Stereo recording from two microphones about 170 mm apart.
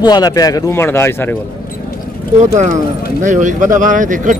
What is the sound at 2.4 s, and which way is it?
Speech, 45° right (ahead or behind).